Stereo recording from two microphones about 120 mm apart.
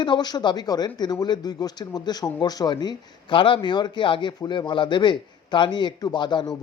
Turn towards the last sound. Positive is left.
turn(degrees=40)  # may be behind; listen again after turning